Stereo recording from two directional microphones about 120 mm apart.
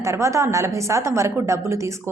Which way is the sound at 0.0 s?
25° right (ahead or behind).